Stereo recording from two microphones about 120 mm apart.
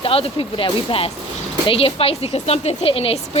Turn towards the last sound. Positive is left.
turn(degrees=50)  # may be behind; listen again after turning